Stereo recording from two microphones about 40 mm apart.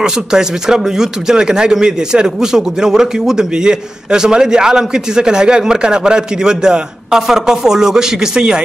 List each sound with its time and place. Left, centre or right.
0.0 s speech: centre